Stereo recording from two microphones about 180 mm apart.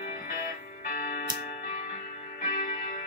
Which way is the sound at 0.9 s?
55° left (ahead or behind).